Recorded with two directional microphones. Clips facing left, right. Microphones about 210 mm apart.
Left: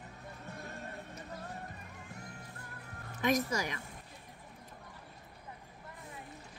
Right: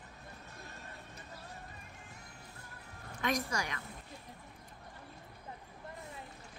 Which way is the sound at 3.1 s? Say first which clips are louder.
Left 4 dB; 20° left (ahead or behind).